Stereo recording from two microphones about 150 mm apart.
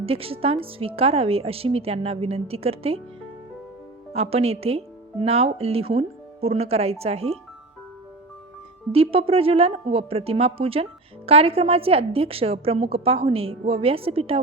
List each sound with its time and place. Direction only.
0.0 s a woman's voice: 40° right (ahead or behind)
4.1 s speech: 45° right (ahead or behind)
8.9 s a woman's voice: 40° right (ahead or behind)